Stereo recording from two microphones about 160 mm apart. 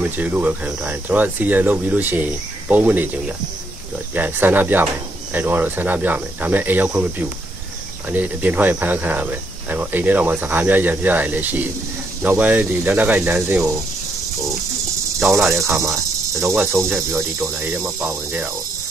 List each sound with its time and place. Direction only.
0.2 s speech: 10° right (ahead or behind)
15.1 s speech: 15° right (ahead or behind)